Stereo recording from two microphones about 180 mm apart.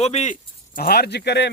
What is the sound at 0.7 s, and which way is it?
Speech, 60° left (ahead or behind).